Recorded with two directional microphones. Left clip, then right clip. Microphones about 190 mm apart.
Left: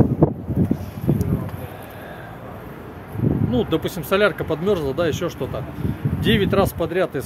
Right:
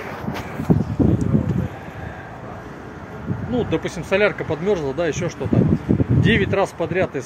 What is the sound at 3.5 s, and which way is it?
Speech, 25° left (ahead or behind).